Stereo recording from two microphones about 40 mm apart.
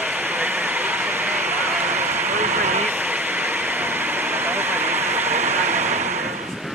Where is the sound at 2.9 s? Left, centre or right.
Right.